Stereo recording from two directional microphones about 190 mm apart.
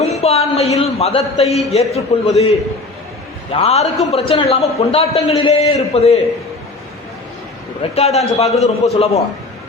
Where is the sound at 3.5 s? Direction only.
35° left (ahead or behind).